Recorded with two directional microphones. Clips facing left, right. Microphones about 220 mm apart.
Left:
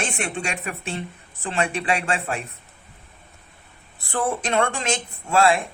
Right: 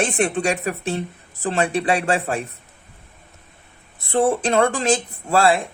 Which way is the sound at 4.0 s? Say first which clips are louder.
Right 7 dB; 25° right (ahead or behind).